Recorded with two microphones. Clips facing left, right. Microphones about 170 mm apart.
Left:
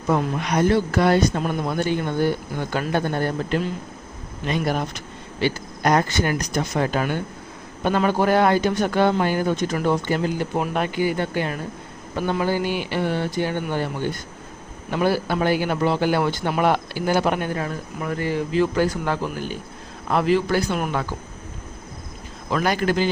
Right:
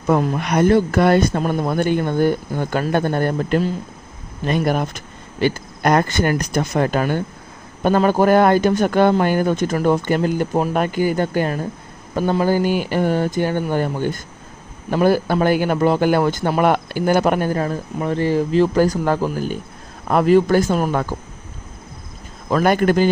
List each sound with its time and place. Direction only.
0.1 s a man's voice: 55° right (ahead or behind); by 21.0 s 40° right (ahead or behind)
22.4 s a man's voice: 50° right (ahead or behind)